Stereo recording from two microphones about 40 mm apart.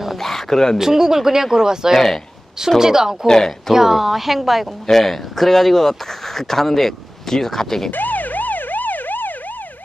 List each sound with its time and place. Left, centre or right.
0.2 s a sound: centre
0.7 s speech: centre
3.3 s speech: centre
3.7 s a woman's voice: centre
7.9 s emergency vehicle: left